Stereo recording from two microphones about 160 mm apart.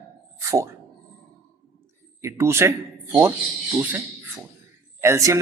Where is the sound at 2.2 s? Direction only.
15° right (ahead or behind).